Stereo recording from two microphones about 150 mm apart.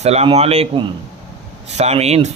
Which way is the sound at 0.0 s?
45° right (ahead or behind).